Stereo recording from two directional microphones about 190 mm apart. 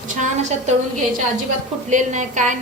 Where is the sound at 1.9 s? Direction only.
40° right (ahead or behind).